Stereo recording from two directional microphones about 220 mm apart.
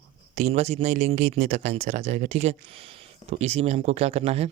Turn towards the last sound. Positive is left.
turn(degrees=-30)  # may be behind; listen again after turning